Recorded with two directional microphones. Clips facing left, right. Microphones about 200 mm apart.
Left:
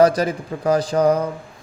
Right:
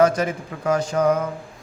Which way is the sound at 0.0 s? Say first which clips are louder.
Left 3 dB; 35° left (ahead or behind).